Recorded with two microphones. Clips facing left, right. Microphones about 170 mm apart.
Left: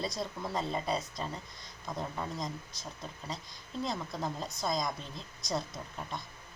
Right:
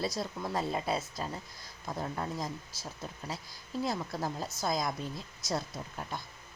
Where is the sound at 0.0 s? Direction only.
Centre (ahead or behind).